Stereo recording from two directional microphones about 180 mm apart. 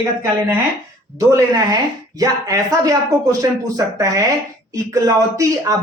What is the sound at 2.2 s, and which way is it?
Speech, 20° right (ahead or behind).